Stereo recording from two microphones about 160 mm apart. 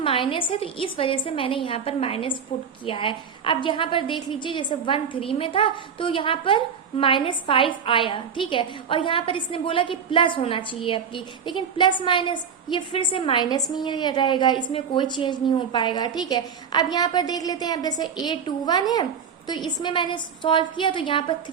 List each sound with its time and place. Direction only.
0.0 s a woman's voice: 35° left (ahead or behind)